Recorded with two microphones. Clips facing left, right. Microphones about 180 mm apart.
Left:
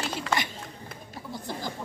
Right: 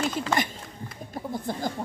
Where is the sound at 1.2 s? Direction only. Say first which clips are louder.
Right 6 dB; 50° right (ahead or behind).